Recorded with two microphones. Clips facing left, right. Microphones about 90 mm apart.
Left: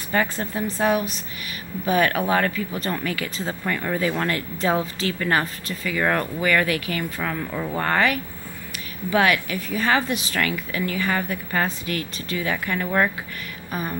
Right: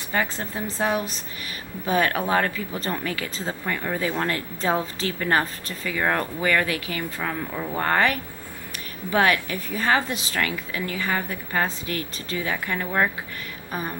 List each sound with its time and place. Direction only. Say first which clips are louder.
0.1 s speech: left 3 dB; 15° right (ahead or behind)
3.6 s speech: left 3 dB; 10° right (ahead or behind)
4.0 s speech: left 2 dB; 20° right (ahead or behind)
5.9 s speech: left 2 dB; 15° right (ahead or behind)
6.4 s speech: left 2 dB; 25° right (ahead or behind)
9.1 s a woman's voice: left 1 dB; 30° right (ahead or behind)
11.6 s speech: left 1 dB; 30° right (ahead or behind); by 13.1 s 10° right (ahead or behind)